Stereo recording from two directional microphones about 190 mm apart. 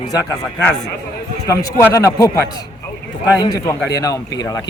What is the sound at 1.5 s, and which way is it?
A man's voice, 15° left (ahead or behind).